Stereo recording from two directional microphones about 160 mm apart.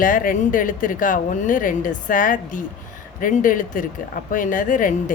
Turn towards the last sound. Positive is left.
turn(degrees=55)  # may be behind; listen again after turning